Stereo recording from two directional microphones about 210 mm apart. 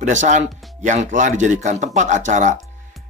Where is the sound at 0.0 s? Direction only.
35° right (ahead or behind).